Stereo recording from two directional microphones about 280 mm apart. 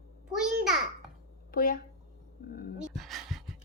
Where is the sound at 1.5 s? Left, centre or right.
Left.